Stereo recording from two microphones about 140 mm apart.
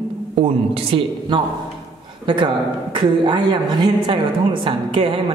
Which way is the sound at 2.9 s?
35° right (ahead or behind).